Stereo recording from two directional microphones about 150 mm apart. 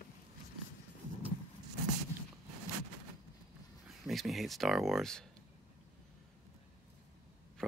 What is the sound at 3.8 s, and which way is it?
Speech, centre (ahead or behind).